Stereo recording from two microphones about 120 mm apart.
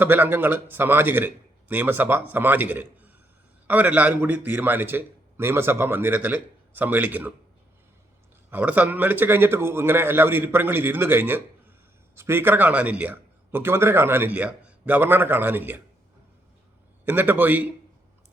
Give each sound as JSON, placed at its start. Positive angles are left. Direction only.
{"t": 0.0, "sound": "a man's voice", "side_deg": -15}
{"t": 8.4, "sound": "a man's voice", "side_deg": -15}
{"t": 17.1, "sound": "a man's voice", "side_deg": -15}